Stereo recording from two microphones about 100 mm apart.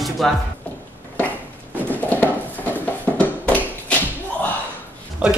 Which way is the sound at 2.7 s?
15° left (ahead or behind).